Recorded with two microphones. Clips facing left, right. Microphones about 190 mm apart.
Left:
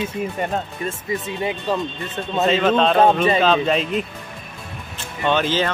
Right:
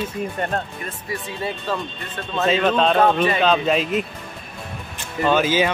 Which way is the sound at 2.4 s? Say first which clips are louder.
Left 1 dB; centre (ahead or behind).